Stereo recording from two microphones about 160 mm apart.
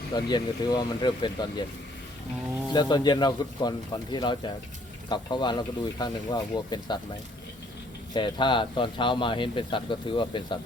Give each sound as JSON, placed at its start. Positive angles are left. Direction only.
{"t": 0.1, "sound": "speech", "side_deg": 25}
{"t": 2.7, "sound": "speech", "side_deg": 25}
{"t": 8.1, "sound": "speech", "side_deg": 30}